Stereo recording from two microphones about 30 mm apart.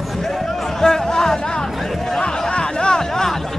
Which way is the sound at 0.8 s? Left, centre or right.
Centre.